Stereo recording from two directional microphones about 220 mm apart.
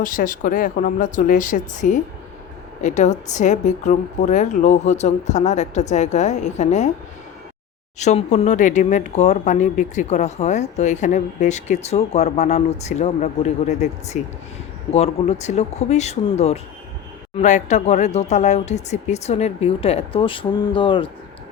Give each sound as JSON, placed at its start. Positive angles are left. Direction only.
{"t": 0.0, "sound": "speech", "side_deg": 40}
{"t": 7.9, "sound": "speech", "side_deg": 30}